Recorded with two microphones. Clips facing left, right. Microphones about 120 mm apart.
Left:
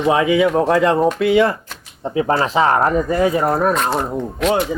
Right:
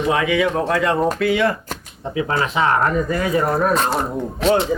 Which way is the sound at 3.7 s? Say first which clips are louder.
Left 1 dB; 35° right (ahead or behind).